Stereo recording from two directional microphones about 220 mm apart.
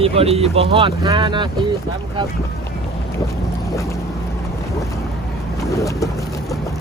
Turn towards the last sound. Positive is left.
turn(degrees=15)  # may be behind; listen again after turning